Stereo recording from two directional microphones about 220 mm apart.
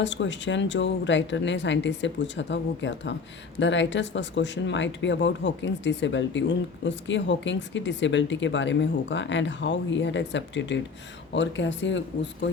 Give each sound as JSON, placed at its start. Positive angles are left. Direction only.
{"t": 0.0, "sound": "speech", "side_deg": 55}